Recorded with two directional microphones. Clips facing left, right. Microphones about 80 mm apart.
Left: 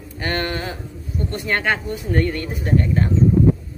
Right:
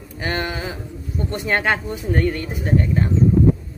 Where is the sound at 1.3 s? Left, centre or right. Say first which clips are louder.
Right 1 dB; right.